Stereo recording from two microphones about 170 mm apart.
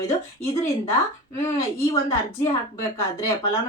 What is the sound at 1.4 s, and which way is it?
Speech, 15° left (ahead or behind).